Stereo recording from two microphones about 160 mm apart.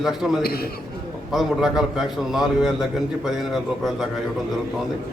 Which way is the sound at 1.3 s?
Centre (ahead or behind).